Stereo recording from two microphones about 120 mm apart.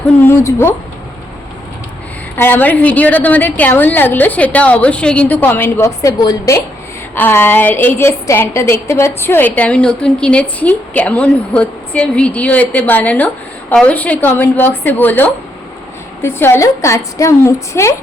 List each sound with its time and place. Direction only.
0.2 s a woman's voice: 20° left (ahead or behind)
2.3 s a woman's voice: 15° left (ahead or behind)
7.2 s a woman's voice: 20° left (ahead or behind)